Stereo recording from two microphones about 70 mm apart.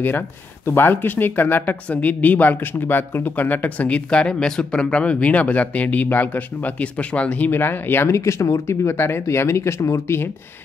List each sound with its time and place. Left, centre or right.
0.7 s speech: left